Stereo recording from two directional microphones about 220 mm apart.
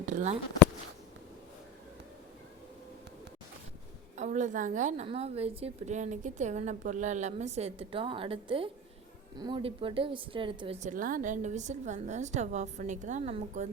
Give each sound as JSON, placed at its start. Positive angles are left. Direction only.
{"t": 0.0, "sound": "speech", "side_deg": -35}
{"t": 4.2, "sound": "a woman's voice", "side_deg": -35}